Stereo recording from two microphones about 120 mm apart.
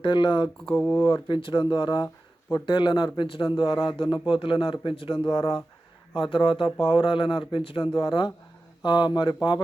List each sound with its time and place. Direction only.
0.0 s a man's voice: 40° left (ahead or behind)
0.7 s speech: 20° left (ahead or behind)
1.0 s a man's voice: 45° left (ahead or behind)